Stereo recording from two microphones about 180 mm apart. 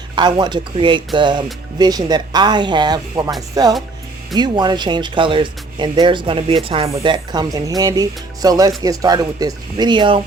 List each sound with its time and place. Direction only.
0.2 s speech: 25° right (ahead or behind)